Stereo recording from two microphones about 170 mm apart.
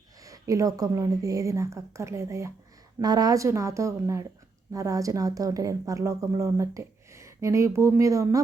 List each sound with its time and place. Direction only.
0.2 s speech: 20° right (ahead or behind)